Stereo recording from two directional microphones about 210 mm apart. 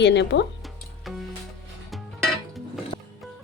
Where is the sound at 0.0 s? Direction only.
55° left (ahead or behind).